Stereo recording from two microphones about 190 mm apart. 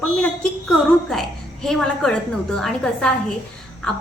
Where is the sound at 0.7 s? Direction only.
Centre (ahead or behind).